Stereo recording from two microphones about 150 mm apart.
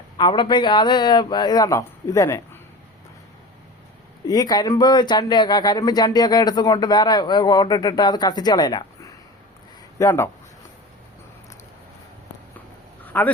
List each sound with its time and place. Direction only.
0.2 s speech: 30° left (ahead or behind)
4.3 s speech: 25° left (ahead or behind)
13.1 s a sound: 10° left (ahead or behind)